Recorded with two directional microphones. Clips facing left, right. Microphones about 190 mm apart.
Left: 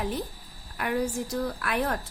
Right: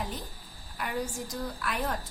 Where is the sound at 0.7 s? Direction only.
60° left (ahead or behind).